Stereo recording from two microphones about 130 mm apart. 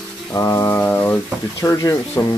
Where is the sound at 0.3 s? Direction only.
25° left (ahead or behind).